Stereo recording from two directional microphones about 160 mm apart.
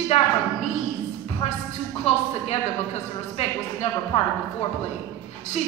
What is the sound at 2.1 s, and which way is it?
Speech, 40° left (ahead or behind).